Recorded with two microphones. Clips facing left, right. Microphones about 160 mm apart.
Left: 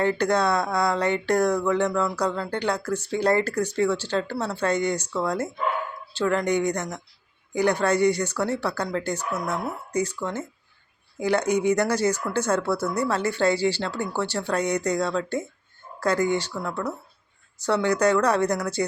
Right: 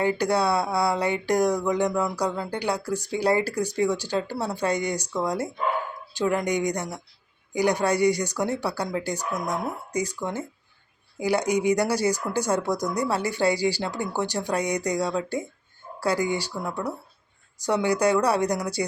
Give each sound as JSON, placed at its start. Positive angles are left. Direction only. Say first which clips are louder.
{"t": 0.0, "sound": "speech", "louder": "left 1 dB", "side_deg": -10}